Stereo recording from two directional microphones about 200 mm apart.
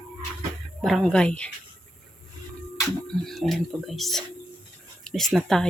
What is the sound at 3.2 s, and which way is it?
Speech, centre (ahead or behind).